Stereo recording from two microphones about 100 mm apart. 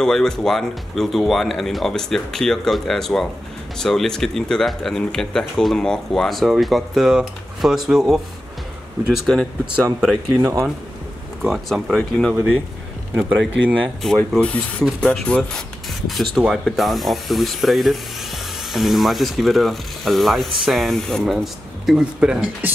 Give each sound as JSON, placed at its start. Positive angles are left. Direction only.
{"t": 0.0, "sound": "speech", "side_deg": 5}
{"t": 9.9, "sound": "speech", "side_deg": -10}
{"t": 11.4, "sound": "speech", "side_deg": 0}
{"t": 13.1, "sound": "a man's voice", "side_deg": -20}
{"t": 14.1, "sound": "speech", "side_deg": 10}
{"t": 21.8, "sound": "speech", "side_deg": -10}